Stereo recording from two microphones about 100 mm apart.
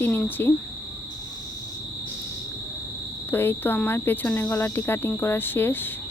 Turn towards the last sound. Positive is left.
turn(degrees=20)  # may be behind; listen again after turning